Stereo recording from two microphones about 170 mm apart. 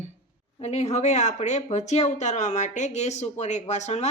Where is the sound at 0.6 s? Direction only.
40° left (ahead or behind).